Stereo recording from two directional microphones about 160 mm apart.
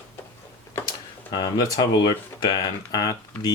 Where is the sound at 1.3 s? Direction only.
30° left (ahead or behind).